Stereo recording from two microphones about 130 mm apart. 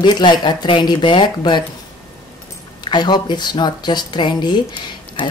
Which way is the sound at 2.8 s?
35° left (ahead or behind).